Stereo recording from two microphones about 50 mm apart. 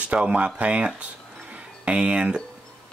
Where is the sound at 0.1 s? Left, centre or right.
Right.